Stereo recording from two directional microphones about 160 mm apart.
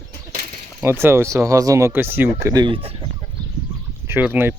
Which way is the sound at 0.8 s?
15° right (ahead or behind).